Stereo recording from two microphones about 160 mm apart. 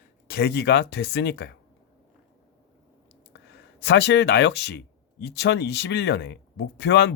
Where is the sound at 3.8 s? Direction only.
90° left.